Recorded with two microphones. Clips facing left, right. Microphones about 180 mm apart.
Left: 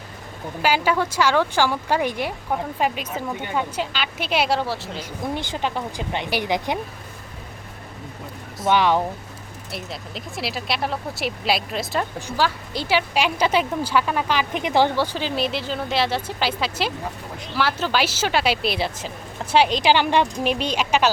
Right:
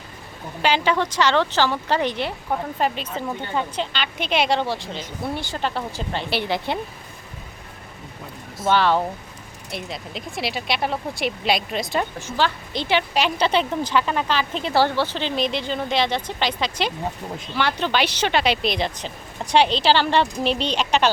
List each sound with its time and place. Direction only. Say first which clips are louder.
0.6 s speech: even; 5° left (ahead or behind)
5.3 s speech: left 1 dB; 15° left (ahead or behind)
8.6 s speech: even; 15° left (ahead or behind)
9.7 s speech: right 2 dB; centre (ahead or behind)